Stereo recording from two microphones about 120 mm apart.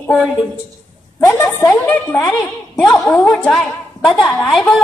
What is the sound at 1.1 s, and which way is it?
Speech, 20° left (ahead or behind).